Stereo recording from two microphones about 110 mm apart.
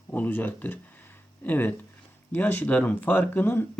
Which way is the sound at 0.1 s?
15° left (ahead or behind).